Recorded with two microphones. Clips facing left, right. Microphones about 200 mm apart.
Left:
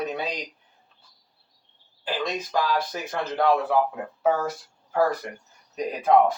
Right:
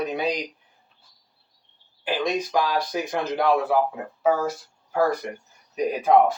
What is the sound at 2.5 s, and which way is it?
Speech, 15° right (ahead or behind).